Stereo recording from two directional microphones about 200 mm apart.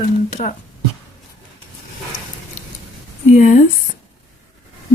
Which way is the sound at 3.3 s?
40° left (ahead or behind).